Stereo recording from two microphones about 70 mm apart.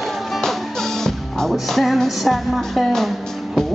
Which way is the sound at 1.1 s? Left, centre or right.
Centre.